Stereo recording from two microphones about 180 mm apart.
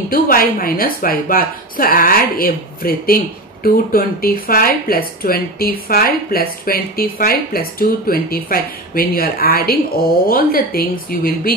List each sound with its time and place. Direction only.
0.1 s speech: 50° left (ahead or behind)